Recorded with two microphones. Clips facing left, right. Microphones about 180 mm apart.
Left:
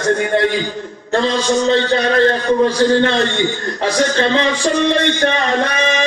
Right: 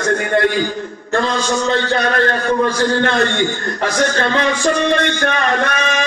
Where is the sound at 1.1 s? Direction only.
50° right (ahead or behind).